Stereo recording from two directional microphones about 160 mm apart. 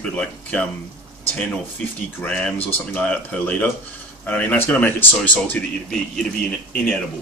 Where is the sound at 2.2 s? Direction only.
5° left (ahead or behind).